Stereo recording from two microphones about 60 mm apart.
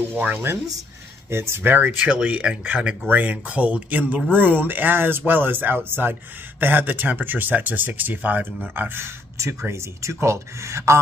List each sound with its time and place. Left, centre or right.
0.1 s speech: right
1.3 s speech: right